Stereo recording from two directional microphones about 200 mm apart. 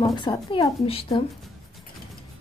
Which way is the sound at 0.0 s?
20° left (ahead or behind).